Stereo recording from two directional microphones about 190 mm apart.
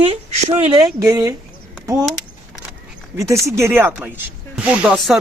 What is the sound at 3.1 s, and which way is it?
Speech, 15° right (ahead or behind).